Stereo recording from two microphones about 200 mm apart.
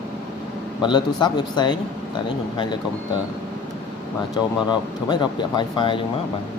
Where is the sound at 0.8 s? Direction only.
20° left (ahead or behind).